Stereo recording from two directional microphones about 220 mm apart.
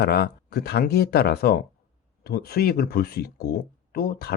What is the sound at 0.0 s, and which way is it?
Speech, 45° left (ahead or behind).